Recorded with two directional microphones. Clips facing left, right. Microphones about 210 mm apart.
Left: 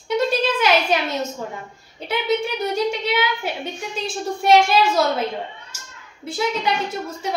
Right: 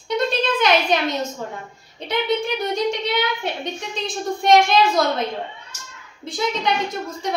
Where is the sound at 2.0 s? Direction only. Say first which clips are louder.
Even; 5° left (ahead or behind).